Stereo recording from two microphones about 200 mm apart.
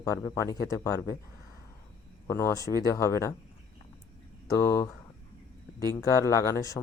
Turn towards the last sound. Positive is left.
turn(degrees=15)  # may be behind; listen again after turning